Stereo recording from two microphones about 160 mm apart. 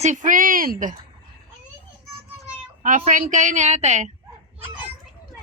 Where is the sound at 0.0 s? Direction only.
50° right (ahead or behind).